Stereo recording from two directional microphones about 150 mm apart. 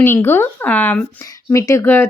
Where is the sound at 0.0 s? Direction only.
15° left (ahead or behind).